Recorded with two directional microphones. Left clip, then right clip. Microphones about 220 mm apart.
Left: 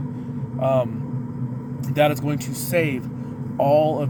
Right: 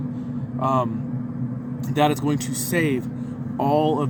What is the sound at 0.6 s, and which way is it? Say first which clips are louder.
Speech: left 2 dB; 30° right (ahead or behind).